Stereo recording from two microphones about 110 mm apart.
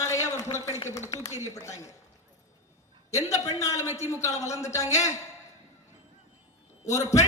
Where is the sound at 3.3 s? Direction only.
30° left (ahead or behind).